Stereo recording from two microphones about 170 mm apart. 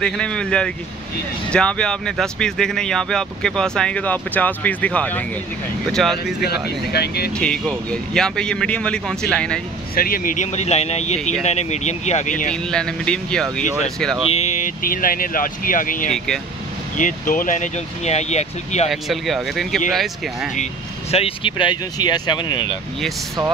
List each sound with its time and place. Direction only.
0.0 s speech: 5° left (ahead or behind)
6.4 s speech: 70° left (ahead or behind)
7.3 s speech: 5° left (ahead or behind)
9.9 s speech: 60° left (ahead or behind)
12.7 s speech: 5° left (ahead or behind)
14.3 s speech: 45° left (ahead or behind)
18.9 s speech: centre (ahead or behind)
21.1 s speech: 35° left (ahead or behind)